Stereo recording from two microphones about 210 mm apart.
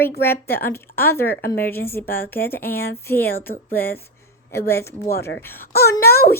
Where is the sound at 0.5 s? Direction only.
10° left (ahead or behind).